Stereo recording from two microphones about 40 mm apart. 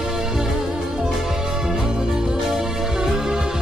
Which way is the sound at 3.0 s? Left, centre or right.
Centre.